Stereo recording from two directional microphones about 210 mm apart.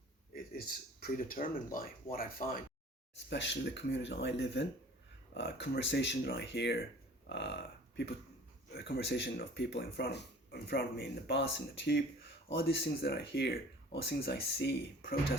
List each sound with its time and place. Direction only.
0.3 s speech: 45° left (ahead or behind)
3.2 s speech: 60° left (ahead or behind)